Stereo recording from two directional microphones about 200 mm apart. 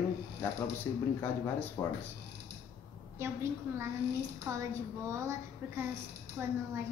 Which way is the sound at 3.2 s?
15° right (ahead or behind).